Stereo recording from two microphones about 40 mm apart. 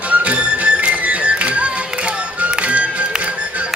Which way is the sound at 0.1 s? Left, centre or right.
Right.